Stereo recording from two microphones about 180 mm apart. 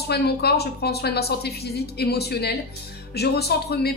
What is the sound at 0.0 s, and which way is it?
A woman's voice, 65° left (ahead or behind).